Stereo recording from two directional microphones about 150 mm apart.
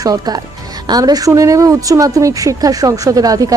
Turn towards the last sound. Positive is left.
turn(degrees=-25)  # may be behind; listen again after turning